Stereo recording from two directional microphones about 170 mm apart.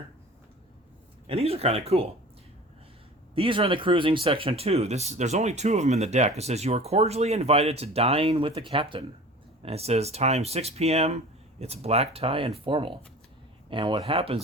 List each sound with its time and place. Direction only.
1.3 s speech: 35° right (ahead or behind)
3.3 s speech: 30° right (ahead or behind)